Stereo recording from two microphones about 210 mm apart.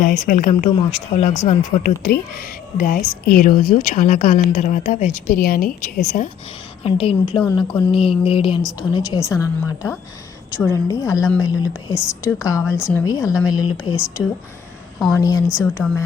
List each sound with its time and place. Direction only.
0.0 s a woman's voice: 40° left (ahead or behind)
2.0 s a woman's voice: 45° left (ahead or behind)
6.8 s a sound: 25° left (ahead or behind)
8.9 s a woman's voice: 15° left (ahead or behind)
15.1 s a woman's voice: 15° left (ahead or behind)
15.6 s speech: 5° left (ahead or behind)